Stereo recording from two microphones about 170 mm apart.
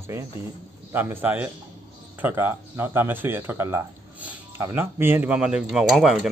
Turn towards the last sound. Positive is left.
turn(degrees=0)  # may be behind; listen again after turning